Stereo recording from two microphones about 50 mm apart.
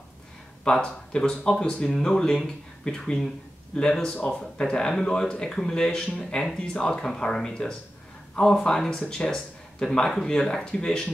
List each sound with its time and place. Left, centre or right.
0.7 s speech: centre